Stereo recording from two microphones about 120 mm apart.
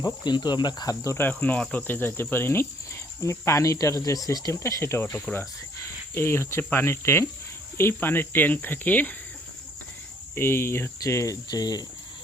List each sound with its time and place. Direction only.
0.0 s speech: 35° left (ahead or behind); by 9.1 s 15° left (ahead or behind)
10.3 s speech: 20° left (ahead or behind)